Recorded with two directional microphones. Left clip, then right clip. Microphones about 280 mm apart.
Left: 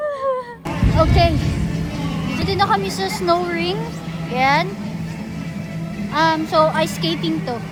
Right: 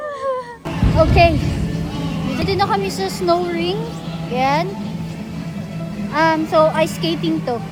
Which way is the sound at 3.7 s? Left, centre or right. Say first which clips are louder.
Right 1 dB; centre.